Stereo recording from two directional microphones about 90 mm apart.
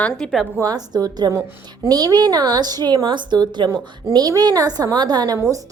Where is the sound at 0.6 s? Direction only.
45° right (ahead or behind).